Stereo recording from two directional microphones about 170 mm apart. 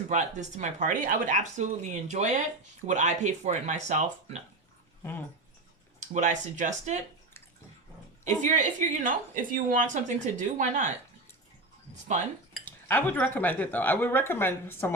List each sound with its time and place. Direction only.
0.1 s a woman's voice: 45° right (ahead or behind)
6.0 s a woman's voice: 45° right (ahead or behind)
8.4 s a woman's voice: 45° right (ahead or behind)
12.6 s speech: 10° left (ahead or behind)